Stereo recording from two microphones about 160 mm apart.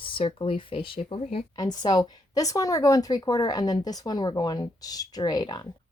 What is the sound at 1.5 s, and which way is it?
A woman's voice, 25° left (ahead or behind).